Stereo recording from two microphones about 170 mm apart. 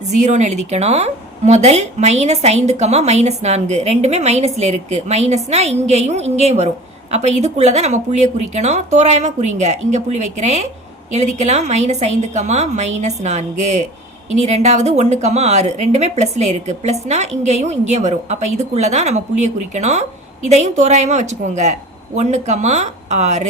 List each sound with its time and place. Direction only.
0.1 s a woman's voice: 45° right (ahead or behind)